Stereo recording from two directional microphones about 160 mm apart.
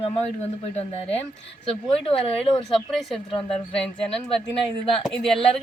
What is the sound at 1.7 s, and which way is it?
Speech, 35° left (ahead or behind).